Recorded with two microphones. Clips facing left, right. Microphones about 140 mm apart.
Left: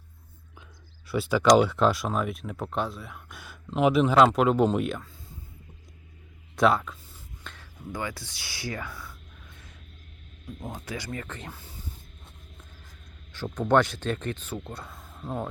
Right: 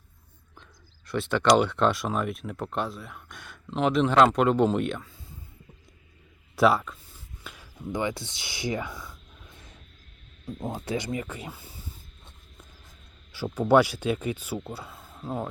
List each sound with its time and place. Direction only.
1.0 s speech: 5° left (ahead or behind)
6.6 s a sound: centre (ahead or behind)
7.5 s speech: 15° right (ahead or behind)
10.4 s speech: 30° right (ahead or behind); by 11.6 s 10° right (ahead or behind)
13.3 s speech: 10° right (ahead or behind)